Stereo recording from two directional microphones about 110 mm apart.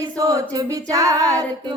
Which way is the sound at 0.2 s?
30° right (ahead or behind).